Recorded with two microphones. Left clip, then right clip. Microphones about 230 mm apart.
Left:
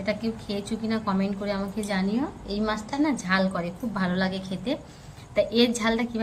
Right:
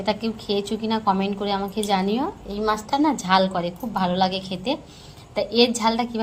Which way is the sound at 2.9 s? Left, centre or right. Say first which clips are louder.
Right 5 dB; right.